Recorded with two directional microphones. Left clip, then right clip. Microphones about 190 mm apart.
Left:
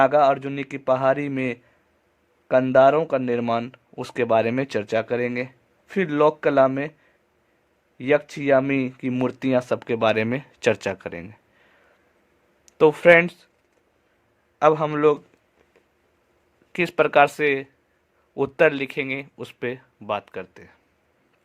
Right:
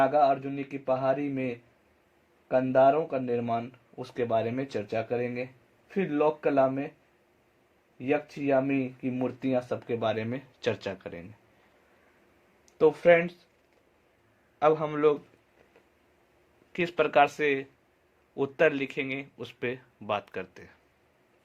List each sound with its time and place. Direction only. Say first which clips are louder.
0.0 s speech: left 6 dB; 35° left (ahead or behind)
7.9 s speech: left 8 dB; 45° left (ahead or behind)
12.7 s speech: left 7 dB; 45° left (ahead or behind)
14.6 s speech: left 6 dB; 30° left (ahead or behind)
16.7 s speech: left 6 dB; 25° left (ahead or behind)